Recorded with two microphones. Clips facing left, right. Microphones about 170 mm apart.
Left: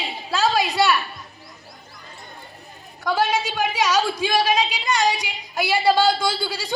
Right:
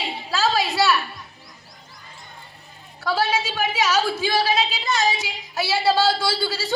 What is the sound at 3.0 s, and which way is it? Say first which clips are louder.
A woman's voice: left 1 dB; 15° left (ahead or behind).